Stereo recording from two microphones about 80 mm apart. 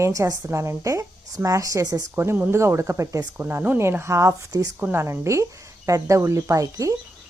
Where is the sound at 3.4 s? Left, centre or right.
Right.